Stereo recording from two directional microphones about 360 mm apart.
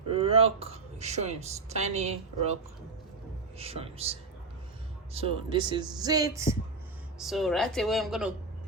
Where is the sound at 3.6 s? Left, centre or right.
Centre.